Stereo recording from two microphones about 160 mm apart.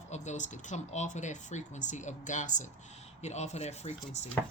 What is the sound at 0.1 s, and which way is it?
Speech, 50° left (ahead or behind).